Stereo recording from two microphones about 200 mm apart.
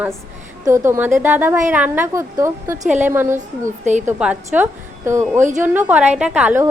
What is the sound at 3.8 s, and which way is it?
Speech, 35° right (ahead or behind).